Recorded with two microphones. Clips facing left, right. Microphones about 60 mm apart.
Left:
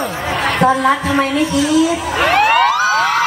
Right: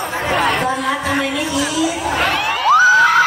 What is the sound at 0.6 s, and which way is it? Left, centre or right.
Speech, left.